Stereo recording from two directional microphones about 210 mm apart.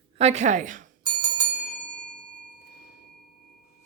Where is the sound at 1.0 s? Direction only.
20° right (ahead or behind).